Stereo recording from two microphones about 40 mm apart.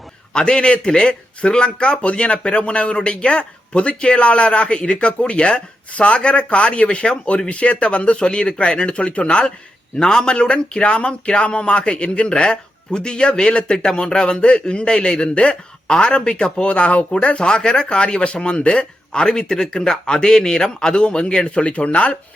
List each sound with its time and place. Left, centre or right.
0.3 s speech: left